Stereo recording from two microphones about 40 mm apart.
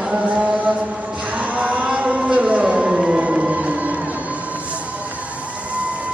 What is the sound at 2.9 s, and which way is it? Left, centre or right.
Music, right.